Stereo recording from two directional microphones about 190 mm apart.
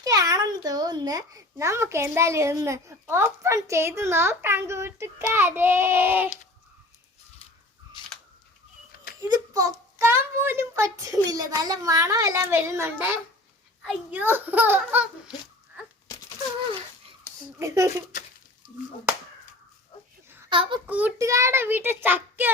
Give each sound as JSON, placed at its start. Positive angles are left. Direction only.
{"t": 0.0, "sound": "a child's voice", "side_deg": -20}
{"t": 9.2, "sound": "a child's voice", "side_deg": -20}
{"t": 17.6, "sound": "a child's voice", "side_deg": -15}
{"t": 20.5, "sound": "a child's voice", "side_deg": -25}
{"t": 20.8, "sound": "a child's voice", "side_deg": -10}